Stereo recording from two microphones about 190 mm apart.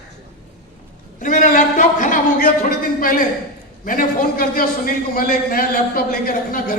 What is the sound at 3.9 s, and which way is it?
A man's voice, 50° left (ahead or behind).